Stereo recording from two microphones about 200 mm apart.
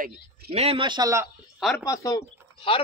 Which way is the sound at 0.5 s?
30° right (ahead or behind).